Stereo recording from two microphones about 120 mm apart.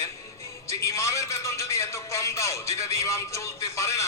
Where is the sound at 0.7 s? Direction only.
25° left (ahead or behind).